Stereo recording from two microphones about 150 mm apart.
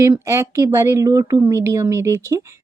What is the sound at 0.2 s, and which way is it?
Speech, 20° right (ahead or behind).